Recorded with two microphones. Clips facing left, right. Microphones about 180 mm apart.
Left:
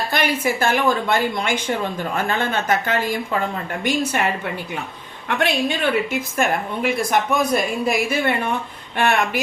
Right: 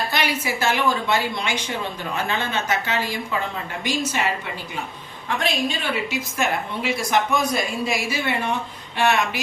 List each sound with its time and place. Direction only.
0.1 s a woman's voice: 50° left (ahead or behind)
5.3 s a woman's voice: 65° left (ahead or behind)